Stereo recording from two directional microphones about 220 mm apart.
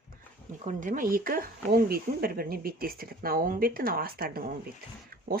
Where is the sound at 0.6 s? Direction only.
35° right (ahead or behind).